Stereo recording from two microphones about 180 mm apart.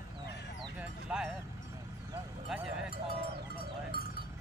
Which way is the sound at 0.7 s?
10° right (ahead or behind).